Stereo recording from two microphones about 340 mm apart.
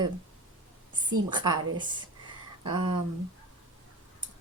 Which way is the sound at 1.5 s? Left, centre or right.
Right.